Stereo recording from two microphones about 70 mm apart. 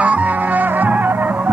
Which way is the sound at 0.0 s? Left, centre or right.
Right.